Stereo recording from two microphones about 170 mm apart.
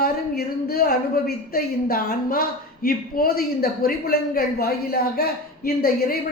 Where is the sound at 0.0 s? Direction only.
65° left (ahead or behind).